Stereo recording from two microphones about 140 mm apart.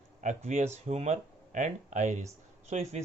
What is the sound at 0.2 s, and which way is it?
Speech, 60° right (ahead or behind).